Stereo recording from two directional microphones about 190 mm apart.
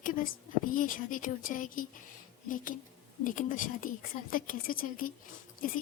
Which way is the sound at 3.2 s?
45° left (ahead or behind).